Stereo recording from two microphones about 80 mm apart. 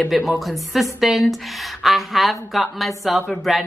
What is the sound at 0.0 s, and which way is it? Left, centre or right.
A woman's voice, centre.